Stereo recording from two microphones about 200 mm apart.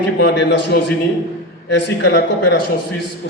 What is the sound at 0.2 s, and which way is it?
A man's voice, 55° left (ahead or behind).